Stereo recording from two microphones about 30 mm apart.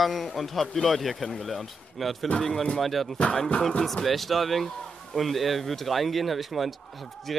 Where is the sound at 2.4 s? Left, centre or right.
Centre.